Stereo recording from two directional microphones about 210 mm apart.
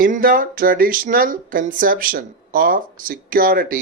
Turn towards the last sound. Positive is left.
turn(degrees=-40)  # may be behind; listen again after turning